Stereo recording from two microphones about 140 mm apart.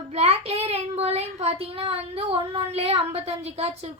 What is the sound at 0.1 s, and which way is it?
A child's voice, 50° right (ahead or behind).